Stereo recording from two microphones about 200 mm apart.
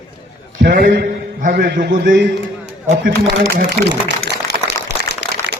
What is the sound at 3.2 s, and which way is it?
Speech, 60° right (ahead or behind).